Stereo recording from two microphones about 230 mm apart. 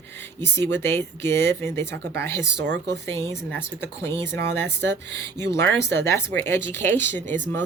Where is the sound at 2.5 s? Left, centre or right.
Right.